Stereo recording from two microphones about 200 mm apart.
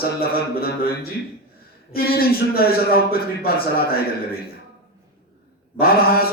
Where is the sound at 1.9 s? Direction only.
50° left (ahead or behind).